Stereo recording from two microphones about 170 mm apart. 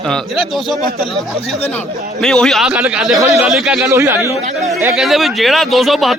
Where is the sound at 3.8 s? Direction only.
15° right (ahead or behind).